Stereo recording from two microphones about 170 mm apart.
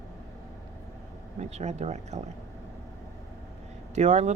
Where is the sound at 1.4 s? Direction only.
40° right (ahead or behind).